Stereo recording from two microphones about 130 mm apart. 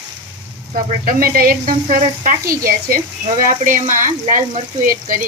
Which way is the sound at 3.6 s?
85° right.